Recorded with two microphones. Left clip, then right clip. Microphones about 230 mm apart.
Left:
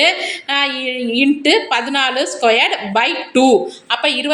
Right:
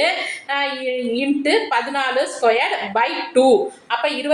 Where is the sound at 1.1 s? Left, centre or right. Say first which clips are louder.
Left 6 dB; left.